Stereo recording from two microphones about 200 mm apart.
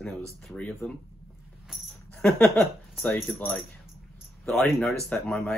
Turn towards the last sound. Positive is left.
turn(degrees=5)  # may be behind; listen again after turning